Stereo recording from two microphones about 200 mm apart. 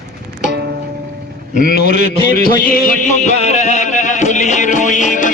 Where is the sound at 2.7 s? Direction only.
40° left (ahead or behind).